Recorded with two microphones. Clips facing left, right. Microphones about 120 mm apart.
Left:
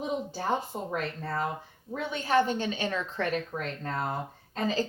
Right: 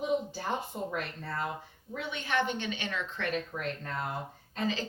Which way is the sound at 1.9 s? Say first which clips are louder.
Left 6 dB; 40° left (ahead or behind).